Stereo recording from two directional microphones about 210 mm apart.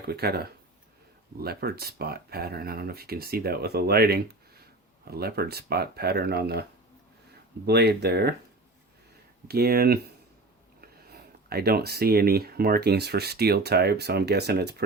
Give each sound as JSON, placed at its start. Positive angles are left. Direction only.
{"t": 0.1, "sound": "speech", "side_deg": -50}
{"t": 9.5, "sound": "speech", "side_deg": -50}